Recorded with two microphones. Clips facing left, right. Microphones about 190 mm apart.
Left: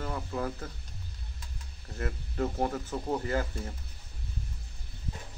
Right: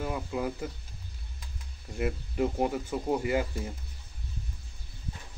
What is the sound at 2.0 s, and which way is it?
Speech, 15° right (ahead or behind).